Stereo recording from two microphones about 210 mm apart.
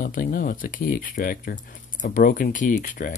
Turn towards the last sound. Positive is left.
turn(degrees=40)  # may be behind; listen again after turning